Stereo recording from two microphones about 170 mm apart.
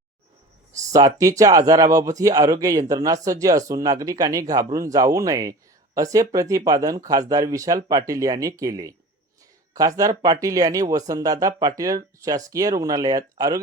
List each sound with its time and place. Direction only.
0.9 s speech: 20° right (ahead or behind)